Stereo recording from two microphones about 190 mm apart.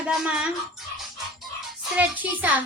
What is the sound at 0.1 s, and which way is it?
Speech, centre (ahead or behind).